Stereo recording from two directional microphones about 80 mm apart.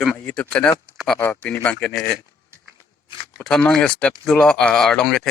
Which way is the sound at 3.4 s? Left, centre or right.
Centre.